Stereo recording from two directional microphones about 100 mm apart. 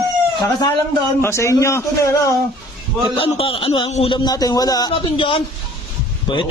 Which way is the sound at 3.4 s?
65° left (ahead or behind).